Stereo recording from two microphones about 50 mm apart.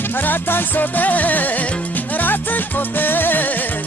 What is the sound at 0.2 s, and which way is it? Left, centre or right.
Music, left.